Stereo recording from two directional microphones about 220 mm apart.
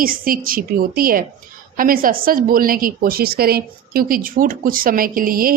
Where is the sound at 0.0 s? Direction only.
40° right (ahead or behind).